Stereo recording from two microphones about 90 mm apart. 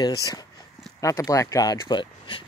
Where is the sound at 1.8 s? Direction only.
60° left (ahead or behind).